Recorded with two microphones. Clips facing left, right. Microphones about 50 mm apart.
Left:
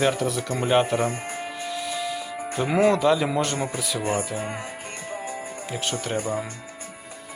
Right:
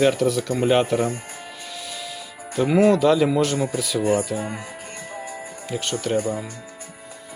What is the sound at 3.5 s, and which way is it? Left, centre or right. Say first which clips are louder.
Speech: right 4 dB; centre.